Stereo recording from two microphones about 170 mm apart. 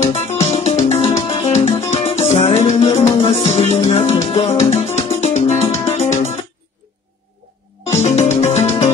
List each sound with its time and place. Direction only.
0.1 s music: 40° left (ahead or behind)
7.8 s music: 40° left (ahead or behind)